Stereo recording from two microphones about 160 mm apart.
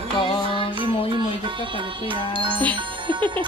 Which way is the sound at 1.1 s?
30° right (ahead or behind).